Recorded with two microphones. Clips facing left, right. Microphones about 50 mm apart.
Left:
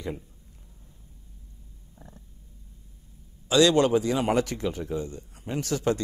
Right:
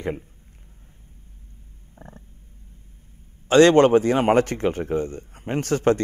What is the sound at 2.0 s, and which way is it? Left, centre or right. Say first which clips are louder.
Frog: right 6 dB; right.